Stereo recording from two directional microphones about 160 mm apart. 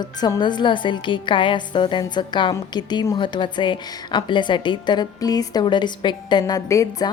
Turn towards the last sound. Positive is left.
turn(degrees=20)  # may be behind; listen again after turning